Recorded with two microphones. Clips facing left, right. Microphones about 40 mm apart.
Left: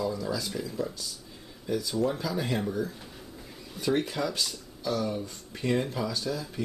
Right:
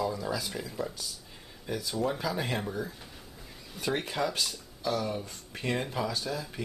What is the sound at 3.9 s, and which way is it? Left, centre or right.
Speech, centre.